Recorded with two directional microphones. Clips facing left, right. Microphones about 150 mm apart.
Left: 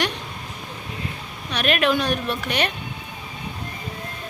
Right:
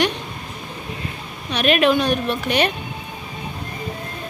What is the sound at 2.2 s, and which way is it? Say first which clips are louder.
Speech: right 3 dB; 25° right (ahead or behind).